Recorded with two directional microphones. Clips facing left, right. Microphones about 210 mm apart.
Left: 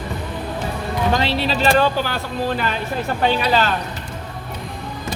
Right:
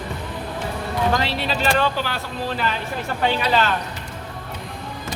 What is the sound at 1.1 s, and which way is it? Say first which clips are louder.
Speech: left 3 dB; 25° left (ahead or behind).